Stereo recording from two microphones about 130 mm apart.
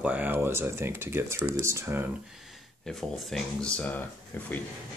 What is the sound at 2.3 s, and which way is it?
Speech, centre (ahead or behind).